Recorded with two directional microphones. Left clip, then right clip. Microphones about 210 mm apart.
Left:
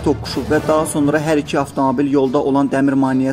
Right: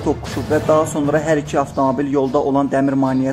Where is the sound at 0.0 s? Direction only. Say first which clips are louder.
Left 2 dB; 25° left (ahead or behind).